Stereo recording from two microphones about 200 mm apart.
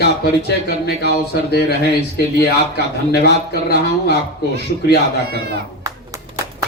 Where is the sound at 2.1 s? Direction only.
55° left (ahead or behind).